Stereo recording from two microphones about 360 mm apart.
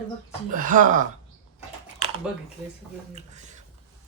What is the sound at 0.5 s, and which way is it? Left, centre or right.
Speech, right.